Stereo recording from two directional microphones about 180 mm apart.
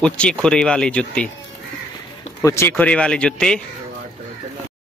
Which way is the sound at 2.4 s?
15° left (ahead or behind).